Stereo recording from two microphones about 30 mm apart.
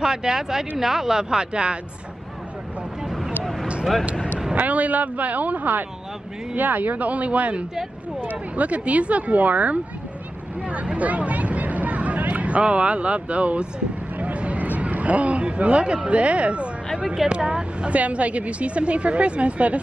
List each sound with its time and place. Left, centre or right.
0.0 s speech: right
3.0 s vehicle: centre
4.6 s speech: right
10.7 s a sound: right
12.6 s speech: right
17.3 s speech: right
17.9 s a woman's voice: right